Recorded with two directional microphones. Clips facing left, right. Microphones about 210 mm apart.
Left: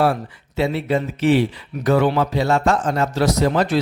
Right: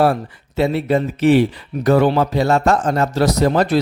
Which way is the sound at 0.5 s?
40° right (ahead or behind).